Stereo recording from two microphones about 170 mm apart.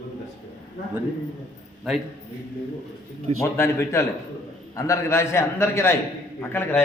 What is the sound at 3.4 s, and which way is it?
A man's voice, 15° left (ahead or behind).